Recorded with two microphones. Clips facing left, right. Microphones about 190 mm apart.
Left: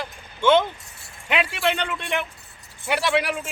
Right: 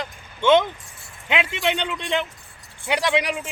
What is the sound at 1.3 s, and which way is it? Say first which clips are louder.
A man's voice: even; 20° right (ahead or behind).